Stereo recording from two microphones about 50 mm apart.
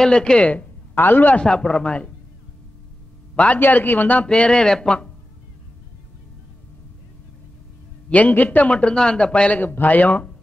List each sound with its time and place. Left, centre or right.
0.0 s speech: centre
0.9 s a man's voice: left
1.3 s speech: centre
3.5 s a man's voice: left
4.3 s speech: centre
8.1 s speech: left
9.6 s a man's voice: left